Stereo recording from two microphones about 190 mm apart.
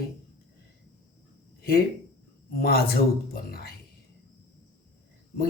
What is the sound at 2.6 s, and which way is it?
Speech, 50° left (ahead or behind).